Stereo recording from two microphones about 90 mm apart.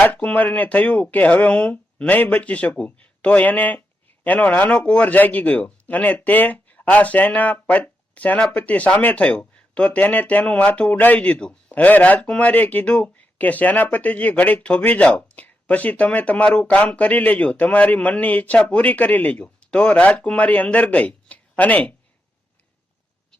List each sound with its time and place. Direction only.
0.0 s speech: 15° left (ahead or behind)